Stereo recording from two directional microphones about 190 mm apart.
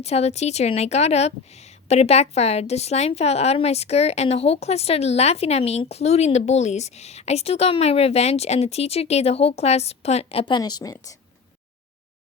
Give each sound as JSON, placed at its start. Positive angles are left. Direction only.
{"t": 0.0, "sound": "a woman's voice", "side_deg": 35}